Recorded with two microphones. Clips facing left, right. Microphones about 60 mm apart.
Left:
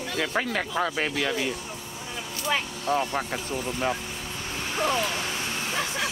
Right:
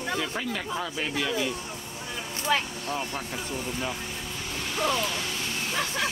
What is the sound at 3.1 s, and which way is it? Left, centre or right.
Speech, left.